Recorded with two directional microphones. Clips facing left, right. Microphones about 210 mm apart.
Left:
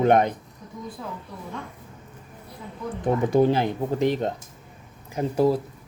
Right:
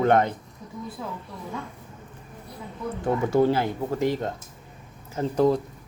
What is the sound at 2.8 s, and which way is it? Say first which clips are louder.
Speech: left 2 dB; 15° left (ahead or behind).